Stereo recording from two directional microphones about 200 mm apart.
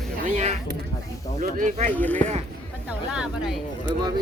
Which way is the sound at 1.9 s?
10° left (ahead or behind).